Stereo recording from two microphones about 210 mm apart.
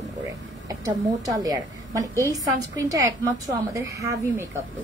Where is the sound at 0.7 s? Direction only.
15° right (ahead or behind).